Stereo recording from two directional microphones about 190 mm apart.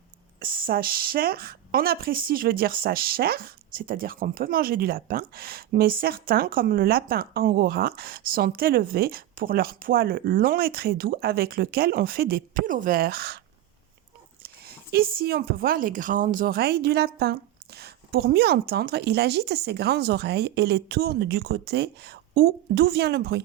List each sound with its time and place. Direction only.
0.3 s speech: 50° right (ahead or behind)
14.4 s speech: 55° right (ahead or behind)